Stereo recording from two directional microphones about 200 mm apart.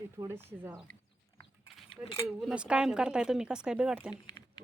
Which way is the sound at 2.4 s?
5° right (ahead or behind).